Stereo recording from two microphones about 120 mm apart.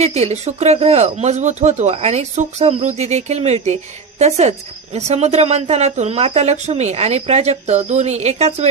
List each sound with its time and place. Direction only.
0.0 s speech: 65° right (ahead or behind)